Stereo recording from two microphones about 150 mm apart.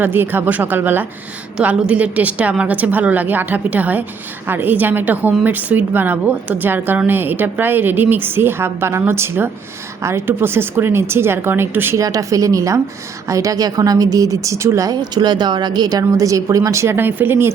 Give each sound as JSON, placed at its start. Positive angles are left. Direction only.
{"t": 0.0, "sound": "a woman's voice", "side_deg": -15}